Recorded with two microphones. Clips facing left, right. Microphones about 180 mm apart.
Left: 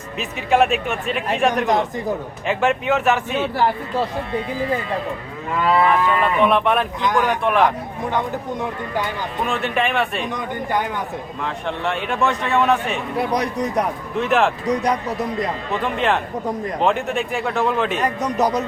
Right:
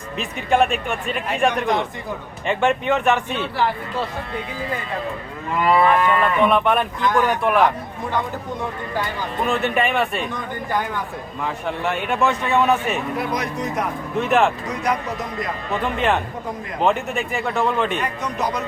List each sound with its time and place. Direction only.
0.2 s speech: 5° left (ahead or behind)
1.6 s speech: 40° left (ahead or behind)
2.5 s speech: 5° left (ahead or behind)
5.6 s speech: centre (ahead or behind)
7.0 s speech: 15° left (ahead or behind)
7.3 s speech: 5° right (ahead or behind)
9.5 s speech: centre (ahead or behind)
10.3 s speech: 20° left (ahead or behind)
11.4 s speech: 5° right (ahead or behind)
13.1 s speech: 35° left (ahead or behind)
14.2 s speech: centre (ahead or behind)
14.7 s speech: 35° left (ahead or behind)
15.8 s speech: centre (ahead or behind)
18.0 s speech: 40° left (ahead or behind)